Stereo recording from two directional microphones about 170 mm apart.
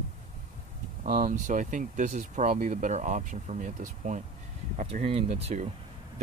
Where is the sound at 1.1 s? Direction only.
55° right (ahead or behind).